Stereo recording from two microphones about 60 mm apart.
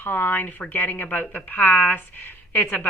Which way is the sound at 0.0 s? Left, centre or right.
Left.